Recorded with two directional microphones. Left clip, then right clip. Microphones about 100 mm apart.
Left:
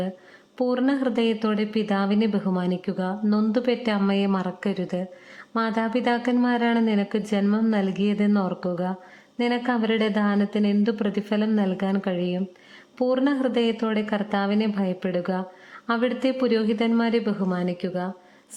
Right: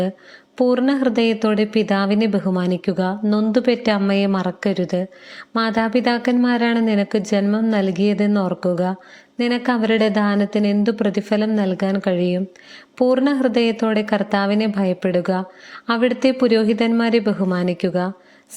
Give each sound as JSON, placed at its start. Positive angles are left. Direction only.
{"t": 0.5, "sound": "a woman's voice", "side_deg": -30}